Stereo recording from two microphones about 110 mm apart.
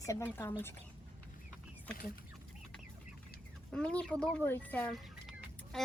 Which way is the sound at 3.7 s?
10° left (ahead or behind).